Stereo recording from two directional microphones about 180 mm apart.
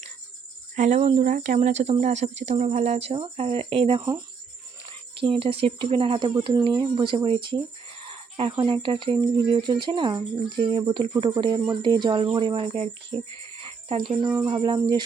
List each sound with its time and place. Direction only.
0.8 s speech: 40° right (ahead or behind)
5.2 s speech: 30° right (ahead or behind)